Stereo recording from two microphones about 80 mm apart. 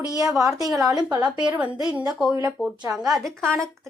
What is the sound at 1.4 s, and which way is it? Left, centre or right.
A woman's voice, centre.